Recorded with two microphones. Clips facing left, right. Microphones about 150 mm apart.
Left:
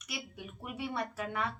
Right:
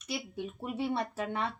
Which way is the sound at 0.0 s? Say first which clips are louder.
Right 7 dB; 30° right (ahead or behind).